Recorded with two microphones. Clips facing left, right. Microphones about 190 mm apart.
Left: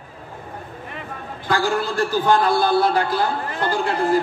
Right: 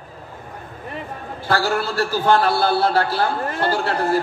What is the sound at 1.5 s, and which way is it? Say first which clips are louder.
A man's voice: even; 15° left (ahead or behind).